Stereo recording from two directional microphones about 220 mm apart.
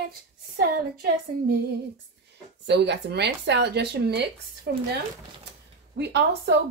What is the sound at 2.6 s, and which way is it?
Speech, 50° right (ahead or behind).